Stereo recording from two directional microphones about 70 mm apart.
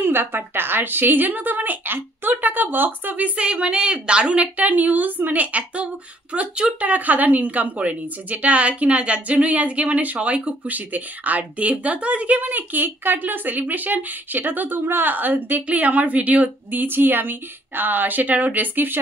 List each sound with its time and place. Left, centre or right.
0.0 s a woman's voice: right